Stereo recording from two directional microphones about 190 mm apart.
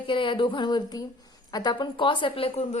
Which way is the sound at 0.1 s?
25° left (ahead or behind).